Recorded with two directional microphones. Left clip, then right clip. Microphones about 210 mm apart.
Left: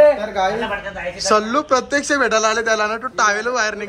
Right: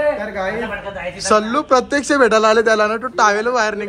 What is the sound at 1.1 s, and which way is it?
Speech, 5° left (ahead or behind).